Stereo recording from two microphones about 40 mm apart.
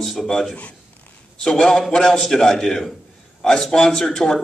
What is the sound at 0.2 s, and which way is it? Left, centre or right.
Speech, centre.